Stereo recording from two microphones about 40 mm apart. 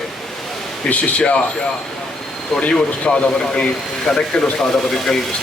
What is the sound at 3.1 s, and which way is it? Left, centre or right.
Speech, left.